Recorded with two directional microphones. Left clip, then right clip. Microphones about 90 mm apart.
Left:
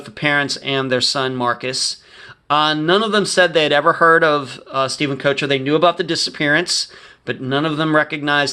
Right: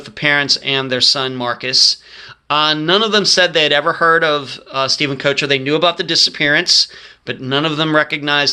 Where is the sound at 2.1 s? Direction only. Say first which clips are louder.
Even; 35° left (ahead or behind).